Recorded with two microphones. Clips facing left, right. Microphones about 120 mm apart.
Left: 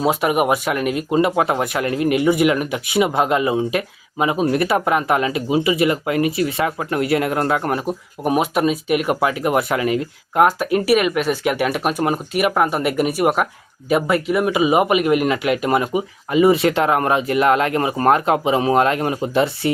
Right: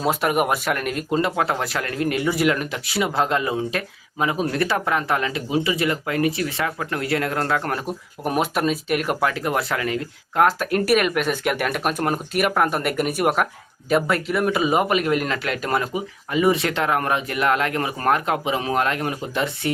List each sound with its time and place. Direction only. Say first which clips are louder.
0.0 s speech: left 3 dB; 5° left (ahead or behind); by 19.7 s 25° left (ahead or behind)